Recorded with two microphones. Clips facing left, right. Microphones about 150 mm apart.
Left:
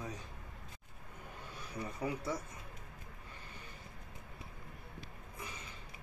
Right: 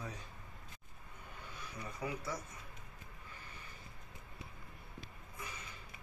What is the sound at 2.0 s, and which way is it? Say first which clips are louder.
Speech: left 3 dB; 35° left (ahead or behind).